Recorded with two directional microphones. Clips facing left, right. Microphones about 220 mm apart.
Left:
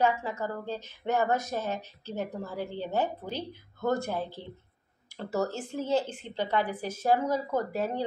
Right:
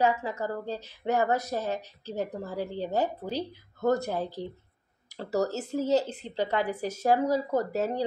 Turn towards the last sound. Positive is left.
turn(degrees=-40)  # may be behind; listen again after turning